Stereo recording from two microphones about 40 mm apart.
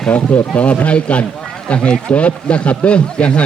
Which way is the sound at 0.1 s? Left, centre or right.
Left.